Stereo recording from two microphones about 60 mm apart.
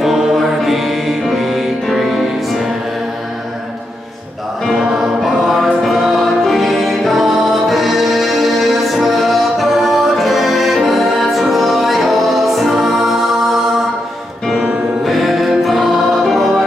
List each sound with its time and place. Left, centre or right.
0.0 s music: centre
4.6 s music: centre
15.0 s music: centre